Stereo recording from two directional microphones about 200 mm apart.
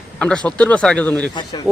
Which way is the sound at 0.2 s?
5° left (ahead or behind).